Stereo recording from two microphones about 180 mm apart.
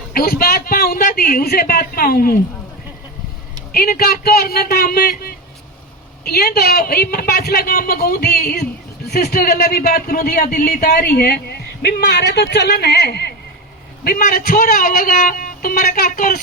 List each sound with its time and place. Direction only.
0.1 s a man's voice: 55° left (ahead or behind)
3.7 s a man's voice: 55° left (ahead or behind)